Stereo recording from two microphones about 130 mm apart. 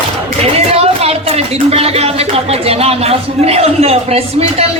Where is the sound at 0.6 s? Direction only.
50° right (ahead or behind).